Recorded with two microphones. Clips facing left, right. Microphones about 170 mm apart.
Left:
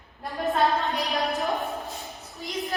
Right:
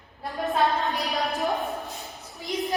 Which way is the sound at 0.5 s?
Centre (ahead or behind).